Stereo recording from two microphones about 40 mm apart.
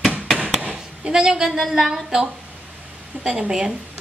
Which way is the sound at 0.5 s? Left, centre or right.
Right.